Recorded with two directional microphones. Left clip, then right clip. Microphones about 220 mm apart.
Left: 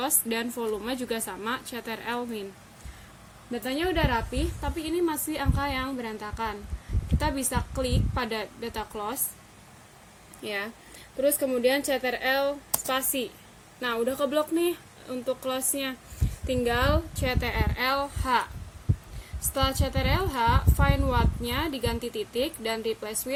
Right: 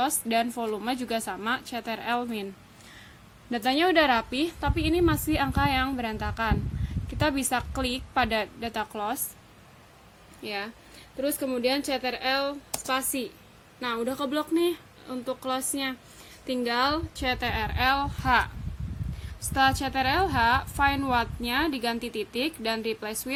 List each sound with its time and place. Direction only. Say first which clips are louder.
0.0 s a woman's voice: right 4 dB; 25° right (ahead or behind)
3.5 s a woman's voice: right 6 dB; 40° right (ahead or behind); by 9.1 s 25° right (ahead or behind)
10.4 s a woman's voice: left 1 dB; 10° right (ahead or behind); by 23.1 s 30° right (ahead or behind)